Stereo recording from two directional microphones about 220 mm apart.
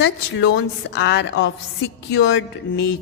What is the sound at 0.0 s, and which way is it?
Music, 55° left (ahead or behind).